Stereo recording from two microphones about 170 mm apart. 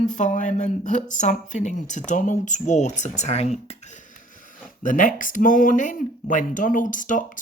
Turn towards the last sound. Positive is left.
turn(degrees=50)  # may be behind; listen again after turning